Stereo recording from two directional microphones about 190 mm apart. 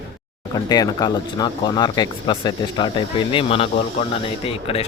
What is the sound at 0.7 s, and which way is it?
Speech, 20° left (ahead or behind).